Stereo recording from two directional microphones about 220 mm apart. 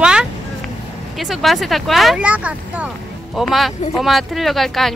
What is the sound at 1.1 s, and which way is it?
A woman's voice, centre (ahead or behind).